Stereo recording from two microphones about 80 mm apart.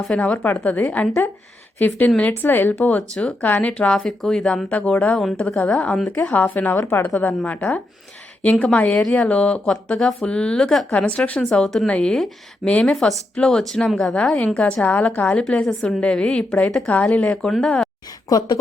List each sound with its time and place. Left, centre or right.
0.2 s a woman's voice: centre
18.3 s a woman's voice: left